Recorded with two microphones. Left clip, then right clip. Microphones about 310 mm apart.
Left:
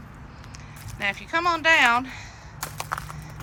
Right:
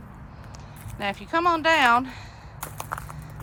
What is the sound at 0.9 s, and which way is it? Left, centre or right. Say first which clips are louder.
Speech: even; centre.